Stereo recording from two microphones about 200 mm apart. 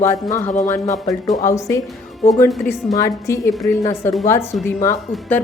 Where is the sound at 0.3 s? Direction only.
15° left (ahead or behind).